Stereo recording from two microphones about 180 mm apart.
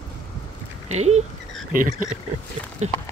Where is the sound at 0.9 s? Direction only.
40° right (ahead or behind).